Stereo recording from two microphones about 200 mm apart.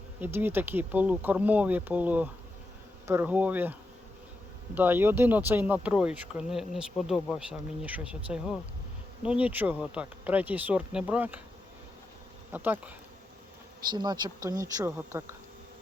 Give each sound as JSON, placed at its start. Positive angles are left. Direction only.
{"t": 0.2, "sound": "speech", "side_deg": -10}
{"t": 12.5, "sound": "speech", "side_deg": -10}
{"t": 13.9, "sound": "speech", "side_deg": -20}